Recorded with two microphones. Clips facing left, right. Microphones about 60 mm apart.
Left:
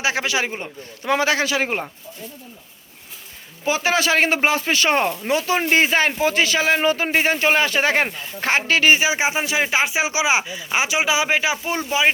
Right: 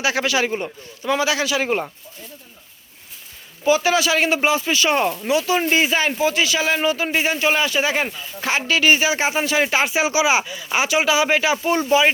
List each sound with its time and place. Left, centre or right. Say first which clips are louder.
0.0 s speech: right 2 dB; left
1.0 s speech: left 1 dB; left
3.7 s speech: right 2 dB; left
8.9 s speech: right 1 dB; centre
11.5 s speech: right 5 dB; centre